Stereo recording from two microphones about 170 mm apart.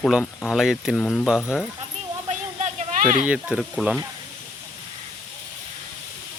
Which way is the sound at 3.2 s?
5° right (ahead or behind).